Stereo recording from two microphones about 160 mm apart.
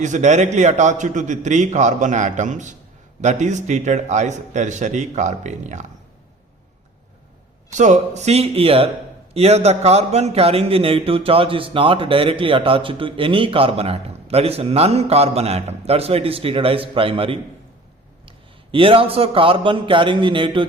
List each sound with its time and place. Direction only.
0.0 s a man's voice: 50° right (ahead or behind)
7.7 s a man's voice: 50° right (ahead or behind); by 20.7 s 30° right (ahead or behind)